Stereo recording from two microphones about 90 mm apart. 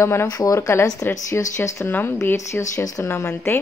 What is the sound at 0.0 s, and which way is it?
Speech, 30° left (ahead or behind).